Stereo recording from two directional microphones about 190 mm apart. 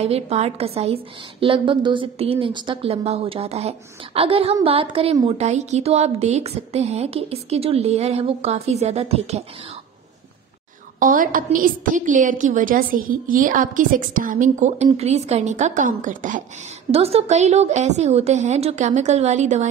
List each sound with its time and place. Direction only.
0.0 s a woman's voice: 35° right (ahead or behind)
11.0 s a woman's voice: 45° right (ahead or behind)
16.9 s speech: 30° right (ahead or behind)